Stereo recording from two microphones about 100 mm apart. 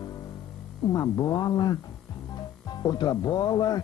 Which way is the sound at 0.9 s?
40° left (ahead or behind).